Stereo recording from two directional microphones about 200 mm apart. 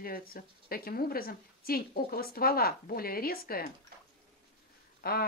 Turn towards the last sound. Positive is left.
turn(degrees=50)  # may be behind; listen again after turning